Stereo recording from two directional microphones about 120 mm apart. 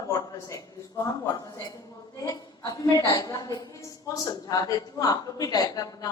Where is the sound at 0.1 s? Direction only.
30° left (ahead or behind).